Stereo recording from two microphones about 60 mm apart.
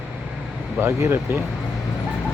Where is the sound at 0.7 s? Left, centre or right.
Right.